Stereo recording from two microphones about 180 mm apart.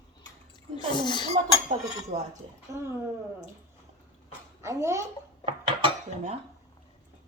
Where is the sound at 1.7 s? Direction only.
40° right (ahead or behind).